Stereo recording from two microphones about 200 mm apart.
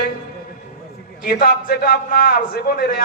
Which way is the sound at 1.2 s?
45° left (ahead or behind).